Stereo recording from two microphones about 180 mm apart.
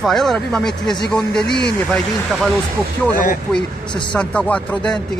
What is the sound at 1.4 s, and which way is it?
Speech, 65° left (ahead or behind).